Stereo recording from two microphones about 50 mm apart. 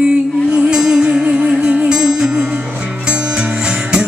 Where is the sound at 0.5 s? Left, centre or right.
Right.